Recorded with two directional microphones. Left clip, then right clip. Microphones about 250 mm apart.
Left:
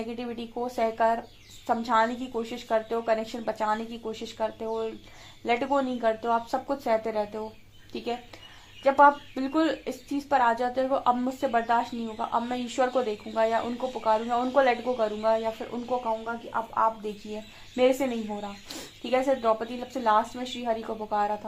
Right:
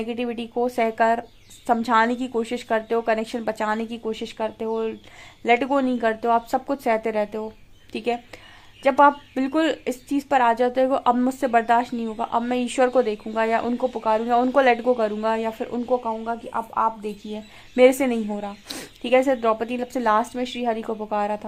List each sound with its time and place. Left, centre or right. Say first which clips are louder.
0.1 s speech: right 8 dB; right